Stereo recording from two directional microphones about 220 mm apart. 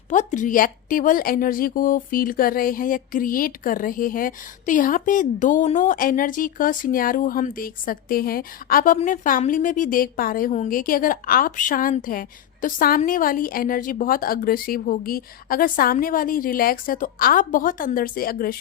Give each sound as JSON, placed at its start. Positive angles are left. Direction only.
{"t": 0.1, "sound": "a woman's voice", "side_deg": 35}